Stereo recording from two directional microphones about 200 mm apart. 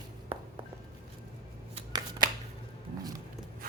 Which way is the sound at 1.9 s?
20° right (ahead or behind).